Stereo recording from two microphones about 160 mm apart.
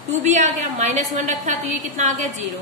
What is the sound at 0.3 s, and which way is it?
A woman's voice, 50° right (ahead or behind).